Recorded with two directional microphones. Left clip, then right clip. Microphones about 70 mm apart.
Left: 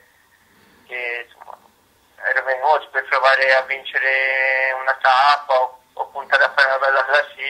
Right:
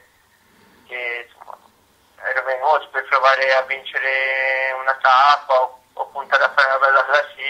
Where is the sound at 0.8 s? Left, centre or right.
Left.